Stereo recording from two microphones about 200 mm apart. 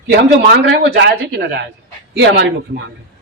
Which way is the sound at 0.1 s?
55° right (ahead or behind).